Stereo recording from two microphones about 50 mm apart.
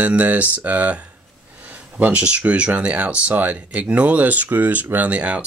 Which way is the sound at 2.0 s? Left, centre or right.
Right.